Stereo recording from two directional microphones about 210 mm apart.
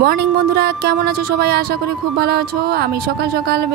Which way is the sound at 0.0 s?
50° right (ahead or behind).